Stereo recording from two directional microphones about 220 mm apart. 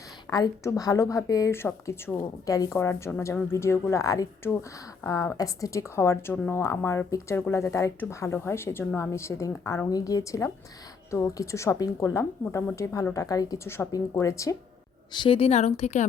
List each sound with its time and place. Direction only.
0.3 s a woman's voice: 15° left (ahead or behind)